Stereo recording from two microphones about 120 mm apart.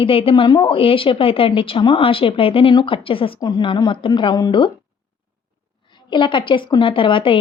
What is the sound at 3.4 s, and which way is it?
Speech, 40° left (ahead or behind).